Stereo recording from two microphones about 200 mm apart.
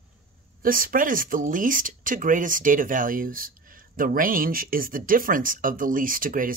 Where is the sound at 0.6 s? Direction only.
45° right (ahead or behind).